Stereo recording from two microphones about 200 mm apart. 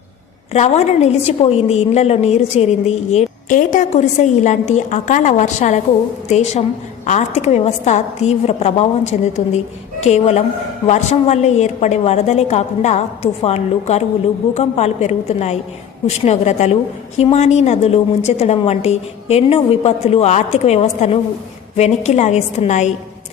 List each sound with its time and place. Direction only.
0.5 s a woman's voice: 35° left (ahead or behind)